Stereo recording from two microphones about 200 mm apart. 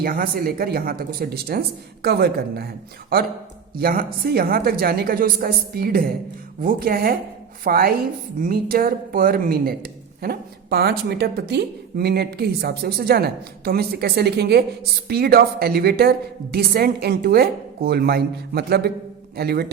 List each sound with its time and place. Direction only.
0.0 s a man's voice: 45° right (ahead or behind)
3.8 s a man's voice: 45° right (ahead or behind)